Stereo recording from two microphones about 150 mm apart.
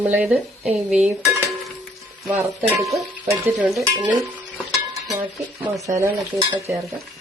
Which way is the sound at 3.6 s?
5° right (ahead or behind).